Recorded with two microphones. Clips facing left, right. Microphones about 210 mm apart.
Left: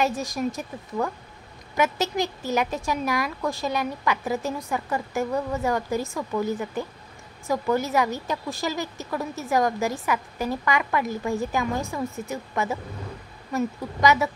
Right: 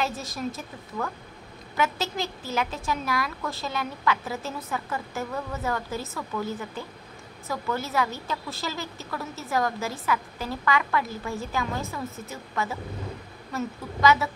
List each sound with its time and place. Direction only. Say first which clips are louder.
0.0 s a woman's voice: left 5 dB; 15° left (ahead or behind)
14.0 s a woman's voice: left 1 dB; 15° left (ahead or behind)